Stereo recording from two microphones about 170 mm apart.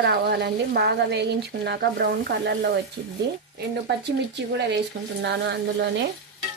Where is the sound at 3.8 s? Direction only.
85° right.